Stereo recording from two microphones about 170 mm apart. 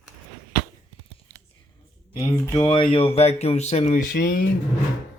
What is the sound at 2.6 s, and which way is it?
Speech, 30° left (ahead or behind).